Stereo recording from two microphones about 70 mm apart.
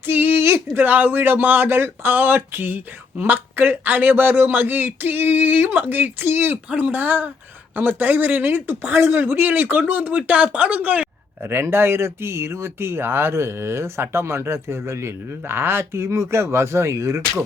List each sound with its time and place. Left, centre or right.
0.0 s a sound: right
0.9 s speech: right
11.4 s speech: right